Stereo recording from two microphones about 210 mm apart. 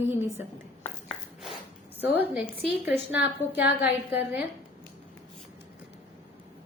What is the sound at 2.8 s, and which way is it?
A woman's voice, 10° right (ahead or behind).